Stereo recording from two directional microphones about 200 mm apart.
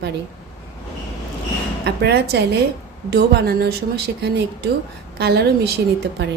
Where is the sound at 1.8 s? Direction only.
55° right (ahead or behind).